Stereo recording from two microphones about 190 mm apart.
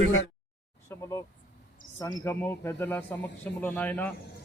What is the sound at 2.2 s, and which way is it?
Speech, 10° left (ahead or behind).